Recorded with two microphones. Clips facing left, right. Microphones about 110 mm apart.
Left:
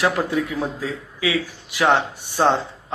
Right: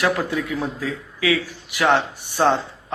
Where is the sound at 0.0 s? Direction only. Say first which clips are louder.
Left 1 dB; 20° left (ahead or behind).